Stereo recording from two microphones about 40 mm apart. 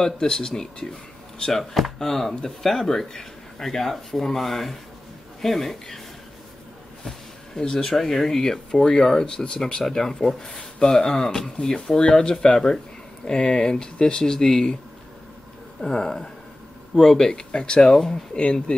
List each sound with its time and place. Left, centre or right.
0.0 s speech: centre
7.8 s speech: centre
9.2 s speech: left
9.8 s speech: centre
15.8 s speech: centre
17.3 s speech: left